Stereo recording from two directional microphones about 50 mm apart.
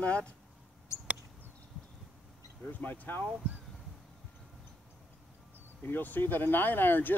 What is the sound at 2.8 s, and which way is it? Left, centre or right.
Speech, left.